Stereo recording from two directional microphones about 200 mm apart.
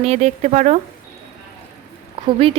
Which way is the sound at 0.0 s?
30° right (ahead or behind).